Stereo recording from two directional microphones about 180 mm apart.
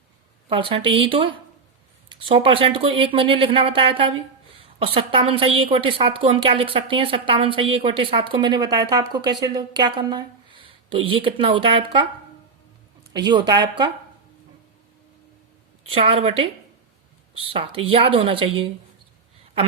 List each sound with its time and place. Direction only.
0.4 s a woman's voice: 30° right (ahead or behind)
13.1 s a woman's voice: 25° right (ahead or behind)
15.9 s a woman's voice: 30° right (ahead or behind)
17.5 s a woman's voice: 30° right (ahead or behind)